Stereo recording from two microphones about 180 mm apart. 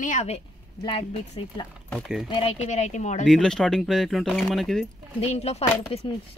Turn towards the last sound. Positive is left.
turn(degrees=30)  # may be behind; listen again after turning